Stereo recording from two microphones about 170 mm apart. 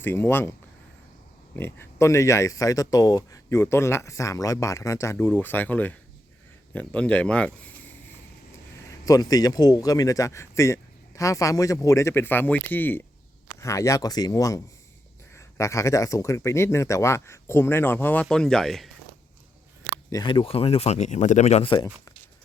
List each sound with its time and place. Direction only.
0.0 s speech: 15° left (ahead or behind)
1.5 s speech: 15° left (ahead or behind)
9.0 s speech: 20° left (ahead or behind); by 18.9 s centre (ahead or behind)
20.1 s speech: 25° left (ahead or behind)